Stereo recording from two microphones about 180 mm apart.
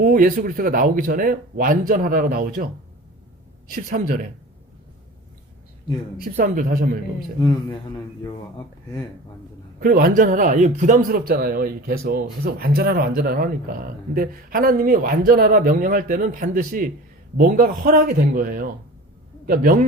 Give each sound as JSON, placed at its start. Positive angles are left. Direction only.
{"t": 0.0, "sound": "a man's voice", "side_deg": -50}
{"t": 3.7, "sound": "a man's voice", "side_deg": -50}
{"t": 6.2, "sound": "a man's voice", "side_deg": -50}
{"t": 9.8, "sound": "a man's voice", "side_deg": -50}